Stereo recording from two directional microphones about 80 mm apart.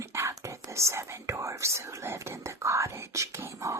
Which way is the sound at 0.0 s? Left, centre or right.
Right.